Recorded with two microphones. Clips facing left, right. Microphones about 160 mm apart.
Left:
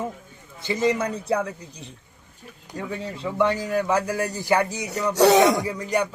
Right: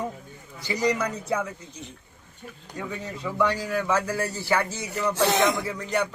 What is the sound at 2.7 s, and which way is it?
A man's voice, 30° left (ahead or behind).